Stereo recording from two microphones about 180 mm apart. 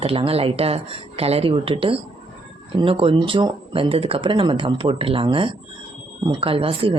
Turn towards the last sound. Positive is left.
turn(degrees=-30)  # may be behind; listen again after turning